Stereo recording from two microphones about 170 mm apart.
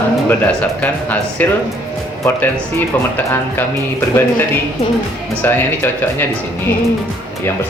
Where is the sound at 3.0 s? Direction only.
10° left (ahead or behind).